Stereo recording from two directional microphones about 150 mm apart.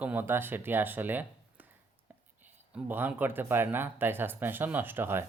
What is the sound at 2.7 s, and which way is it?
Speech, 10° right (ahead or behind).